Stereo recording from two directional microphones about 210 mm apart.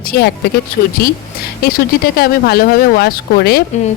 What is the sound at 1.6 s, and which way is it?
Speech, 45° left (ahead or behind).